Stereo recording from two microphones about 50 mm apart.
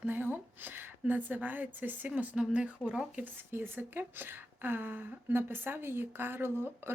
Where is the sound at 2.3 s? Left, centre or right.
Centre.